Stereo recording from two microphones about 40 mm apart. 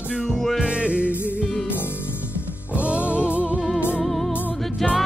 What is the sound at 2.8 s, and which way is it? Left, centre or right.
Music, right.